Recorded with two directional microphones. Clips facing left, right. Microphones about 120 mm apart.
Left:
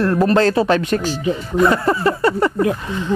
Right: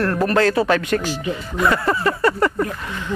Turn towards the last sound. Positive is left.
turn(degrees=20)  # may be behind; listen again after turning